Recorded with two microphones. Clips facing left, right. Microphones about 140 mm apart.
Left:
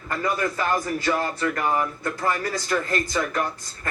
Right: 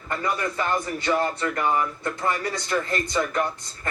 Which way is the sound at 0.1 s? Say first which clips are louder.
Left 2 dB; 25° right (ahead or behind).